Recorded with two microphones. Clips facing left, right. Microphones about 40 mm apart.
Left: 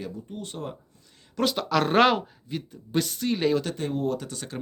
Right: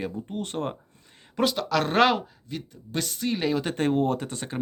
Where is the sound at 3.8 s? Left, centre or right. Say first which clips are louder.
Right 4 dB; right.